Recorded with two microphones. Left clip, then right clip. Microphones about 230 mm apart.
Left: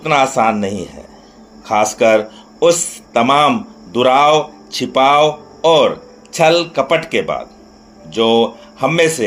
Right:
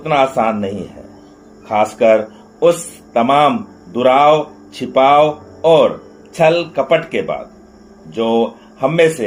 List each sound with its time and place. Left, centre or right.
0.0 s speech: left